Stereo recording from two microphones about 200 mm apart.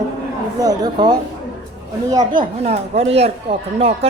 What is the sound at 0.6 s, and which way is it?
Speech, 20° right (ahead or behind).